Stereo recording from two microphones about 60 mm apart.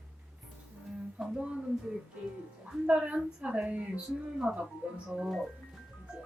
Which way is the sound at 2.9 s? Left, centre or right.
Right.